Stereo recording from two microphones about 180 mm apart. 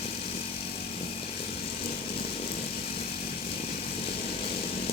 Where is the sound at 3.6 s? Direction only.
35° left (ahead or behind).